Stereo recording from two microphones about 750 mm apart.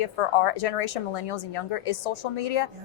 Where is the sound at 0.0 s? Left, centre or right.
Left.